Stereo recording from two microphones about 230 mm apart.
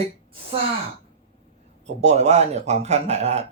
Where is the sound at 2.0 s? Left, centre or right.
Right.